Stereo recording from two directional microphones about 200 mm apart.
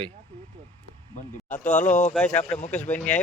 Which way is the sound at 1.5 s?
40° left (ahead or behind).